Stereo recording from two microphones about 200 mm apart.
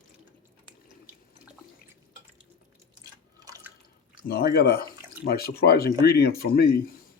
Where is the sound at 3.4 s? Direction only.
15° right (ahead or behind).